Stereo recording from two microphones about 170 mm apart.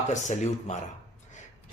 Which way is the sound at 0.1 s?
45° left (ahead or behind).